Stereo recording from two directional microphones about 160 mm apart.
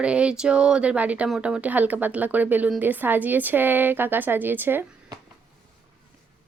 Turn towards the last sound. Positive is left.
turn(degrees=-10)  # may be behind; listen again after turning